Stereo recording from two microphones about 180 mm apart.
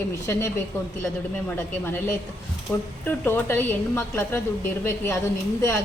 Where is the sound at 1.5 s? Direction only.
10° left (ahead or behind).